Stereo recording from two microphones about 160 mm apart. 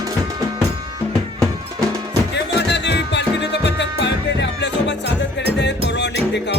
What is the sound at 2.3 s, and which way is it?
Music, 90° left.